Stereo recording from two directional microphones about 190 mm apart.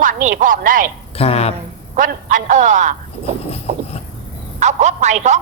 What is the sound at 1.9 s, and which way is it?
A man's voice, 45° right (ahead or behind).